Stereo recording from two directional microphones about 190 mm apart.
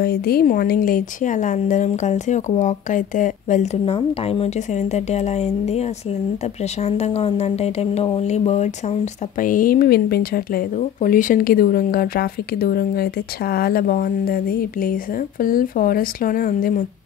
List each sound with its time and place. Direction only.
0.0 s speech: 55° left (ahead or behind)
3.8 s speech: 30° left (ahead or behind); by 16.8 s 45° left (ahead or behind)